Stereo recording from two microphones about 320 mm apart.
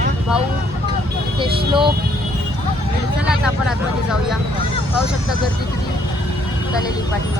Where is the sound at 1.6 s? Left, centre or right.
Centre.